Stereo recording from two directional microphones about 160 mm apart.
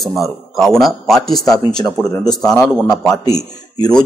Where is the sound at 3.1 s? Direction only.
25° left (ahead or behind).